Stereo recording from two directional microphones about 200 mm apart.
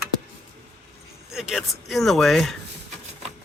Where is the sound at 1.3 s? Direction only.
Centre (ahead or behind).